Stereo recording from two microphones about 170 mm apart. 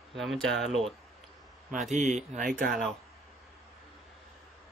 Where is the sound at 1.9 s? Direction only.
45° right (ahead or behind).